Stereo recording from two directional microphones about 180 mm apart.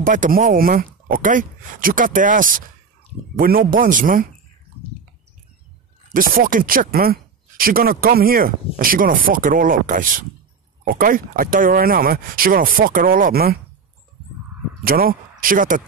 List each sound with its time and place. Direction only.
0.0 s speech: 50° right (ahead or behind)
6.0 s speech: 50° right (ahead or behind)
14.8 s speech: 55° right (ahead or behind)